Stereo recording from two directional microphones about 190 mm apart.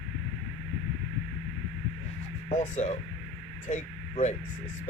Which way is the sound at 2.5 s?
35° left (ahead or behind).